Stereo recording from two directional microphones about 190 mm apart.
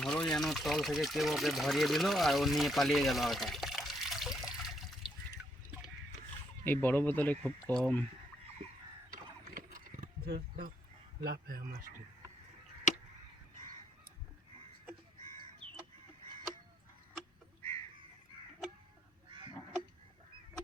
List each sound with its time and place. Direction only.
0.0 s speech: 5° left (ahead or behind)
6.7 s speech: 10° left (ahead or behind)
9.1 s mechanisms: 50° right (ahead or behind)
11.2 s speech: 50° right (ahead or behind)
12.9 s honk: 40° left (ahead or behind)